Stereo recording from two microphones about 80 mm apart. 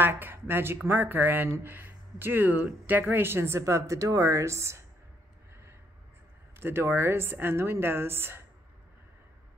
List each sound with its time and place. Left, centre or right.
0.0 s a woman's voice: right
6.6 s a woman's voice: right